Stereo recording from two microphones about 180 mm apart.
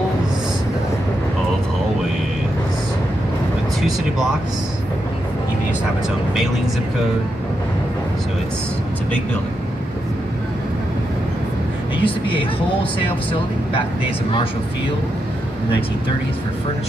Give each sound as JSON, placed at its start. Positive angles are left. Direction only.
{"t": 12.0, "sound": "speech", "side_deg": 30}
{"t": 14.0, "sound": "speech", "side_deg": 30}